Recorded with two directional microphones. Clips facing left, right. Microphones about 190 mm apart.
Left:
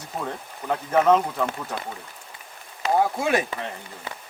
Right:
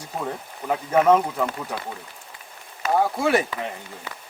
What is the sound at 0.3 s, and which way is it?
Speech, 10° right (ahead or behind).